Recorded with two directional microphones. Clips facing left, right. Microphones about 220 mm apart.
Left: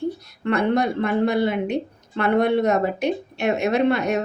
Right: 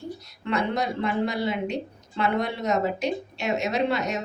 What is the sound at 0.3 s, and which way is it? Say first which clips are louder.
Speech: left 5 dB; 55° left (ahead or behind).